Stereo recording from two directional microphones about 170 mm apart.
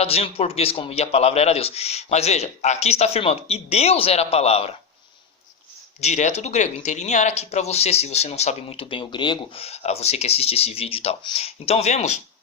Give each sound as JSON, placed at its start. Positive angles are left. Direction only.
{"t": 0.0, "sound": "speech", "side_deg": 35}
{"t": 6.0, "sound": "speech", "side_deg": 40}